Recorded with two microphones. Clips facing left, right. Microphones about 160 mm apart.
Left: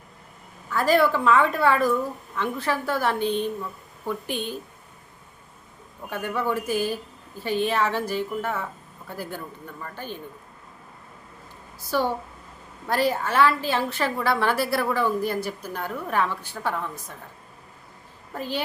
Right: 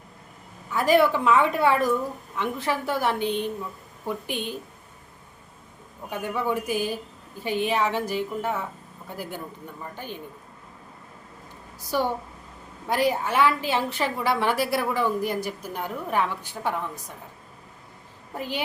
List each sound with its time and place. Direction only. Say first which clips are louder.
0.7 s a woman's voice: right 1 dB; 15° right (ahead or behind)
6.1 s a woman's voice: even; 15° right (ahead or behind)
11.8 s a woman's voice: left 1 dB; 15° right (ahead or behind)
18.3 s a woman's voice: left 1 dB; 15° right (ahead or behind)